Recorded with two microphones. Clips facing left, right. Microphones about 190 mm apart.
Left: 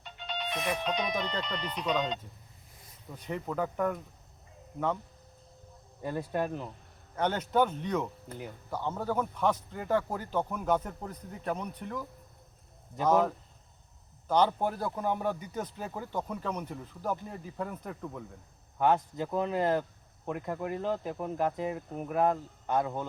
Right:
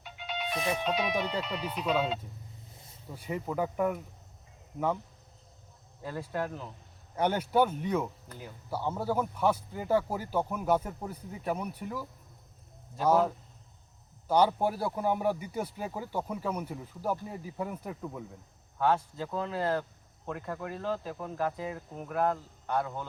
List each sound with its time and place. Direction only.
0.0 s music: 5° right (ahead or behind)
0.8 s a man's voice: 5° right (ahead or behind)
6.0 s speech: 15° left (ahead or behind)
7.2 s a man's voice: 10° right (ahead or behind)
8.3 s cricket: 20° left (ahead or behind)
8.7 s a man's voice: 10° right (ahead or behind)
14.3 s a man's voice: 10° right (ahead or behind)
18.8 s speech: 20° left (ahead or behind)
20.2 s cricket: 15° left (ahead or behind)